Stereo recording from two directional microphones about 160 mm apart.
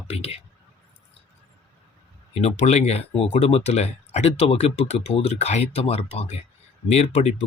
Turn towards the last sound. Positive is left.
turn(degrees=45)  # may be behind; listen again after turning